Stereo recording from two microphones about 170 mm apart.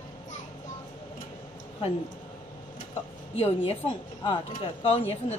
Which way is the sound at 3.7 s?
35° left (ahead or behind).